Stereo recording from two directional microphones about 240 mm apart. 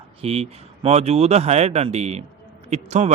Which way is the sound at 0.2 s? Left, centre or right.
Right.